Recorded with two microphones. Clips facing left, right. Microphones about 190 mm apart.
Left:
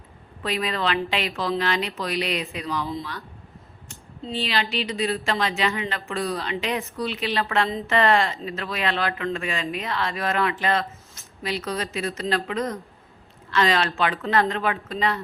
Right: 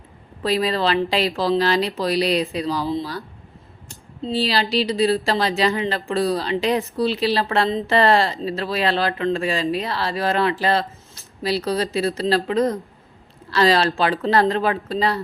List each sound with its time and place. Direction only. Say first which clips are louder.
0.4 s speech: right 6 dB; 35° right (ahead or behind)